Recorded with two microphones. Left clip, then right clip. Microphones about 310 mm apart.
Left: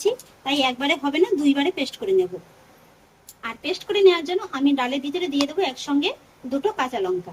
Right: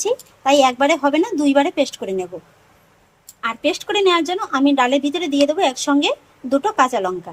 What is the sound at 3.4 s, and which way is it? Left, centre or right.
Speech, centre.